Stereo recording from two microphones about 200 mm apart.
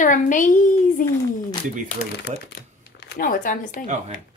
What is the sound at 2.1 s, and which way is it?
Speech, 60° left (ahead or behind).